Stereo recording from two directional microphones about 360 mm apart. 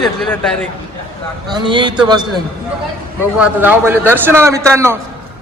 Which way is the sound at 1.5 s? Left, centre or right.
Centre.